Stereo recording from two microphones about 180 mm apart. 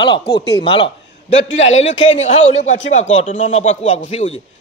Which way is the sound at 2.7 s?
90° left.